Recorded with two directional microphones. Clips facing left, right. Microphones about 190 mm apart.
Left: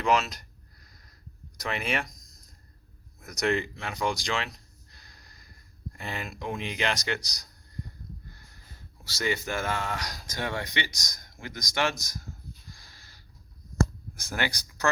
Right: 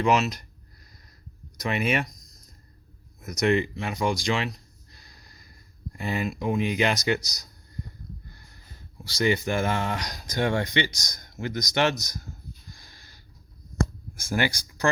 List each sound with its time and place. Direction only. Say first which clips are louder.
0.0 s speech: right 3 dB; 5° right (ahead or behind)
1.6 s speech: right 5 dB; 5° right (ahead or behind)
3.2 s speech: right 4 dB; 5° right (ahead or behind)
6.0 s speech: right 8 dB; 10° right (ahead or behind)
9.0 s speech: right 6 dB; 20° right (ahead or behind)
14.2 s speech: right 5 dB; 10° right (ahead or behind)